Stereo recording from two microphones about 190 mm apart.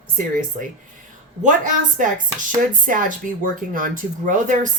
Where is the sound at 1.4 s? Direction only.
40° right (ahead or behind).